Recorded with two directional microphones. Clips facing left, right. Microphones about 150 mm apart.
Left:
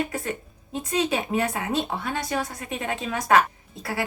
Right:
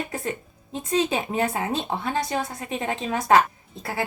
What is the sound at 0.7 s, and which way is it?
Speech, 25° right (ahead or behind).